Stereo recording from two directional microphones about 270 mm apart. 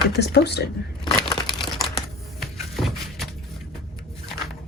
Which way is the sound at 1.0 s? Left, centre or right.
Centre.